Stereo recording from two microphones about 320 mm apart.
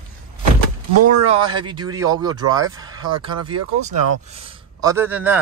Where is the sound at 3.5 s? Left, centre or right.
Right.